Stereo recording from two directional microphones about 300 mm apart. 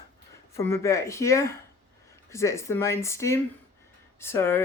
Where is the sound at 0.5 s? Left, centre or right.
Centre.